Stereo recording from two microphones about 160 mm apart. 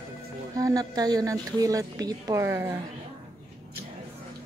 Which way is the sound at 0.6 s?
20° right (ahead or behind).